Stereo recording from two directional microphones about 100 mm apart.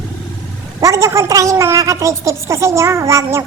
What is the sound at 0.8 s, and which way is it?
Child singing, 30° right (ahead or behind).